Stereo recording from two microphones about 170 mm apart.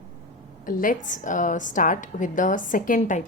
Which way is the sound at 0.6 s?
50° left (ahead or behind).